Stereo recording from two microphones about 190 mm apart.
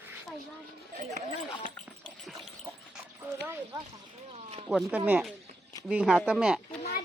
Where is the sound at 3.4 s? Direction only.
10° right (ahead or behind).